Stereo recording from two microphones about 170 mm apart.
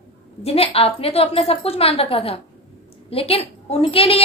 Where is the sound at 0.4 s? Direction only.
35° left (ahead or behind).